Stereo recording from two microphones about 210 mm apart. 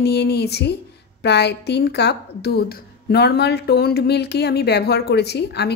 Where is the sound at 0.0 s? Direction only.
50° left (ahead or behind).